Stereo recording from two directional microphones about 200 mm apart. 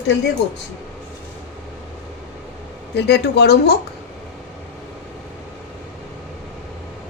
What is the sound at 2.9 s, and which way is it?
Speech, 55° left (ahead or behind).